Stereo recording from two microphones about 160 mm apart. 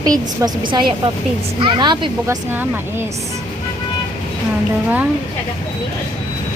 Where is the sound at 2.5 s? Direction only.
15° right (ahead or behind).